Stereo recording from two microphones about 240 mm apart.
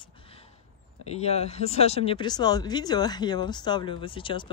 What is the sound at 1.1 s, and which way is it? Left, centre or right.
Speech, left.